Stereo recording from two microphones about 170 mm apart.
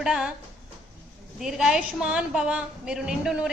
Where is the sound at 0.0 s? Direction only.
5° right (ahead or behind).